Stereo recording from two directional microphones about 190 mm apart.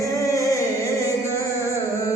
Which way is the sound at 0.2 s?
15° left (ahead or behind).